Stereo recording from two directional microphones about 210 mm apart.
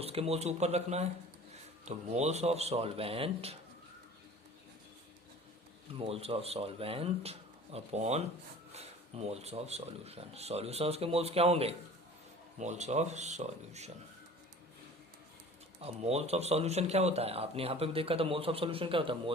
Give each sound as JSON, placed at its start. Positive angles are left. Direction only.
{"t": 0.0, "sound": "speech", "side_deg": -30}
{"t": 5.9, "sound": "speech", "side_deg": -25}
{"t": 15.8, "sound": "speech", "side_deg": -30}